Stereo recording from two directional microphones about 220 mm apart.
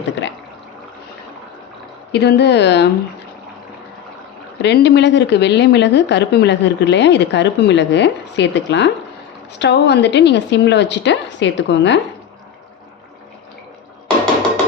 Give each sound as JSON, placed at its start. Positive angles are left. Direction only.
{"t": 0.2, "sound": "a sound", "side_deg": 55}
{"t": 2.1, "sound": "speech", "side_deg": 50}
{"t": 4.6, "sound": "speech", "side_deg": 50}